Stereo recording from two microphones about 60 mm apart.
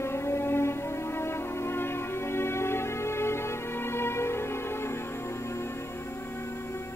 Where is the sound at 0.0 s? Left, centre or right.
Left.